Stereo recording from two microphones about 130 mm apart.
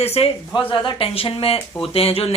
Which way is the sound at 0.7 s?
40° left (ahead or behind).